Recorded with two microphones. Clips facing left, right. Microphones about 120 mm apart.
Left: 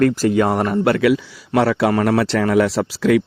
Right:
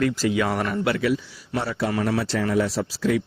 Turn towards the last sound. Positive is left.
turn(degrees=70)  # may be behind; listen again after turning